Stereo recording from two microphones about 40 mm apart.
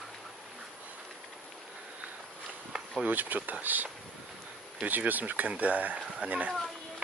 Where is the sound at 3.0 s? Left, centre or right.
Right.